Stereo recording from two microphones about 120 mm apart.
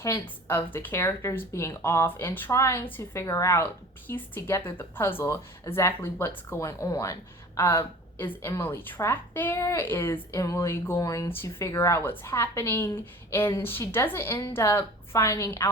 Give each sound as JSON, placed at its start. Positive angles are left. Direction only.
{"t": 0.0, "sound": "speech", "side_deg": 20}